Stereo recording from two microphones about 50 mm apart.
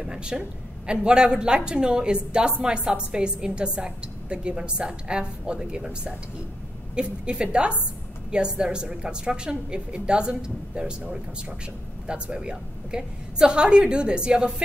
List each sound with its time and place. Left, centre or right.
0.0 s a woman's voice: centre